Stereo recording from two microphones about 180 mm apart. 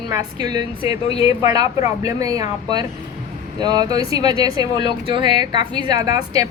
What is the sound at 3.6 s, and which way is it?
Speech, 20° right (ahead or behind).